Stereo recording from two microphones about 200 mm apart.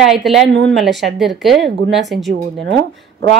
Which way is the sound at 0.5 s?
70° right (ahead or behind).